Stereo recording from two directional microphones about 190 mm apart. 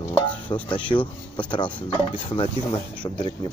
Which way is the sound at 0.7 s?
25° left (ahead or behind).